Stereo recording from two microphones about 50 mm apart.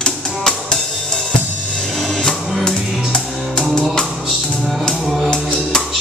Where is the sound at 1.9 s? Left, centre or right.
Centre.